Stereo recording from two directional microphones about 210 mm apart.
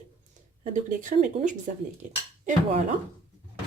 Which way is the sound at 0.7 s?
40° right (ahead or behind).